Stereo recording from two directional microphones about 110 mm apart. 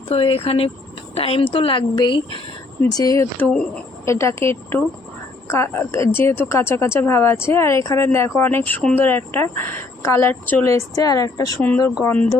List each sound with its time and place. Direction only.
0.1 s speech: 55° left (ahead or behind)
2.9 s speech: 35° left (ahead or behind)
3.3 s speech: 10° left (ahead or behind)
4.0 s a woman's voice: 25° left (ahead or behind)
10.7 s speech: 30° left (ahead or behind)
12.0 s speech: 15° left (ahead or behind)